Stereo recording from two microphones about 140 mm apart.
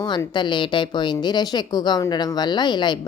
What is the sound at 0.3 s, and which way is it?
Speech, 35° left (ahead or behind).